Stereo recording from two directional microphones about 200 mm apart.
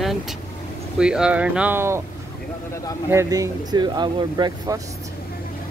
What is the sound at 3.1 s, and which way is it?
Speech, 15° right (ahead or behind).